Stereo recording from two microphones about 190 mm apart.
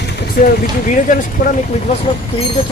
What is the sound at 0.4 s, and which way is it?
Speech, 45° left (ahead or behind).